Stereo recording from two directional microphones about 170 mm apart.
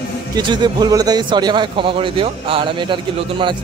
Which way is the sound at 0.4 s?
25° right (ahead or behind).